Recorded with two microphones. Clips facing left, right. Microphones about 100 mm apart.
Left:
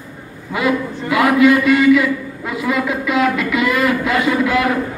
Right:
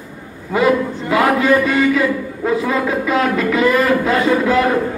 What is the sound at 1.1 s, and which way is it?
A man's voice, 35° right (ahead or behind).